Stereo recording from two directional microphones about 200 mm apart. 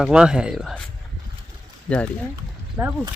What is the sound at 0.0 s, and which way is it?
Speech, 5° right (ahead or behind).